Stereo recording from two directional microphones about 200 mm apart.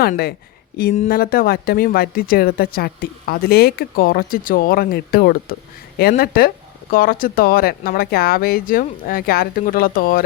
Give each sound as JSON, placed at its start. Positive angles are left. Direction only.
{"t": 0.0, "sound": "speech", "side_deg": 50}